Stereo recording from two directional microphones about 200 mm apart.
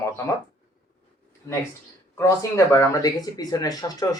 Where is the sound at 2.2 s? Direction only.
15° left (ahead or behind).